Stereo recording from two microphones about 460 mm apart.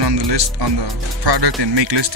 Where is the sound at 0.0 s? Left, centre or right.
Right.